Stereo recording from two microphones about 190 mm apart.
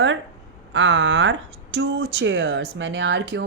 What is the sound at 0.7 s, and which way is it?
Speech, 80° right.